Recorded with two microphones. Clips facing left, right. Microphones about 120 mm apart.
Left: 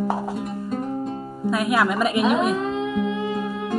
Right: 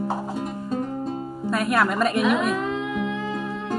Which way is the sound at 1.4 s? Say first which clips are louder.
Left 1 dB; 5° left (ahead or behind).